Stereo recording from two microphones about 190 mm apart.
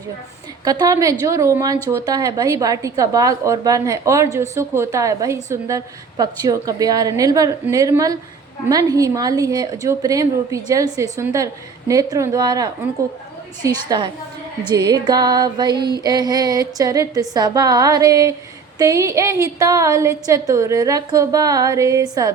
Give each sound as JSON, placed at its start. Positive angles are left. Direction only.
{"t": 0.6, "sound": "a woman's voice", "side_deg": -20}